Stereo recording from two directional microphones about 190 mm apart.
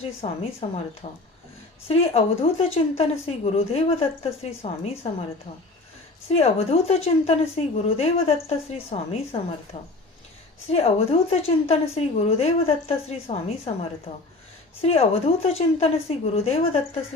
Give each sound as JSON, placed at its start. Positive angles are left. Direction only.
{"t": 0.2, "sound": "speech", "side_deg": 35}
{"t": 6.2, "sound": "speech", "side_deg": 30}
{"t": 14.8, "sound": "speech", "side_deg": 30}